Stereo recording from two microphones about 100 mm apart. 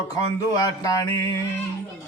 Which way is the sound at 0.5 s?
35° left (ahead or behind).